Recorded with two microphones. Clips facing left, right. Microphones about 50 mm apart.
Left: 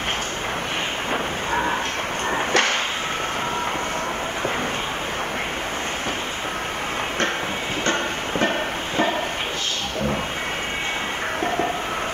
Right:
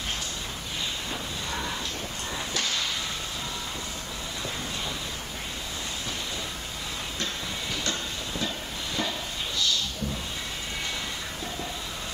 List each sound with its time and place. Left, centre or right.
1.5 s a sound: left
2.3 s dog: left
7.8 s music: left